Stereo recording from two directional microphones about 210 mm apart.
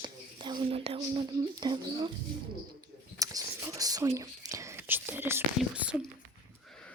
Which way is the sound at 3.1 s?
15° right (ahead or behind).